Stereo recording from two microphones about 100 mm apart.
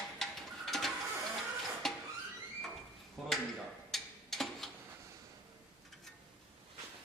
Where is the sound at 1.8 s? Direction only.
5° left (ahead or behind).